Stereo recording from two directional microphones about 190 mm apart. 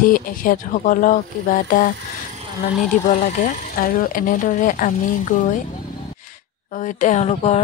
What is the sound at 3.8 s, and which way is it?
Speech, 50° left (ahead or behind).